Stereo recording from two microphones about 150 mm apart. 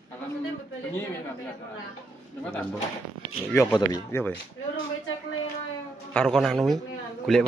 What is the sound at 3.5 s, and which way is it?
Speech, 25° left (ahead or behind).